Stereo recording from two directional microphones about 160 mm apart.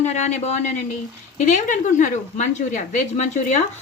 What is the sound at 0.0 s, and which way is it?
Speech, 45° left (ahead or behind).